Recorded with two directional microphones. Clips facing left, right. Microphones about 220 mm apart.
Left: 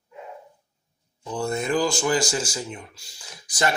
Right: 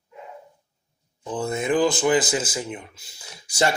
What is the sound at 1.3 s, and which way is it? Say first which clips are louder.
A man's voice: right 1 dB; 20° right (ahead or behind).